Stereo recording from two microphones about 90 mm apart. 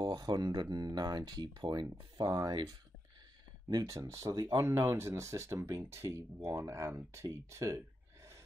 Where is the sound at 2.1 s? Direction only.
40° right (ahead or behind).